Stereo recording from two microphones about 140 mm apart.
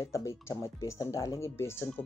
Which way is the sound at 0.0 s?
20° left (ahead or behind).